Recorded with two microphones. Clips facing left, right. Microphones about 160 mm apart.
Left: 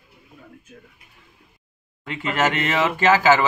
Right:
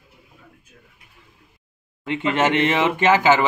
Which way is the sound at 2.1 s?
25° right (ahead or behind).